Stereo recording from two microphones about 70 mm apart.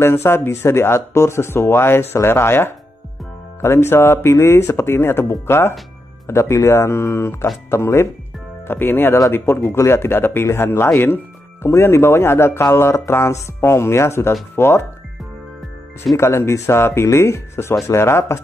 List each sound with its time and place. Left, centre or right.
0.0 s speech: left
8.6 s speech: left
16.2 s speech: left